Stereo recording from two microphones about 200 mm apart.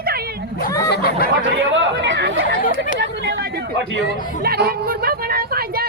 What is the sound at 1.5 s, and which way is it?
Chatter, 70° right (ahead or behind).